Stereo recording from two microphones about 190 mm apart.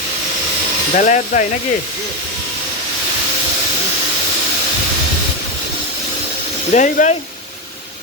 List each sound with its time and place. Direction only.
0.9 s speech: 45° left (ahead or behind)
6.7 s speech: 40° left (ahead or behind)